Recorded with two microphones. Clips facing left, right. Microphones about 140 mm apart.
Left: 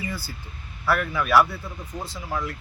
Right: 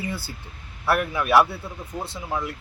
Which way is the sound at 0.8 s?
20° right (ahead or behind).